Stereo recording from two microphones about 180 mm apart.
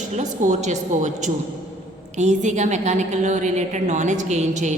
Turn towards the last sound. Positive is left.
turn(degrees=-40)  # may be behind; listen again after turning